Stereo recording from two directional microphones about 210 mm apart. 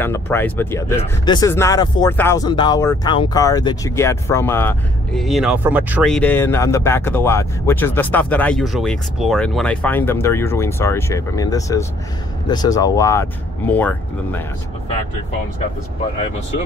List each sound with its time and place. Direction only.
0.0 s speech: 10° left (ahead or behind)